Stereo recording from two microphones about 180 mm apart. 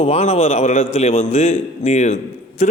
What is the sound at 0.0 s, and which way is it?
A man's voice, 35° left (ahead or behind).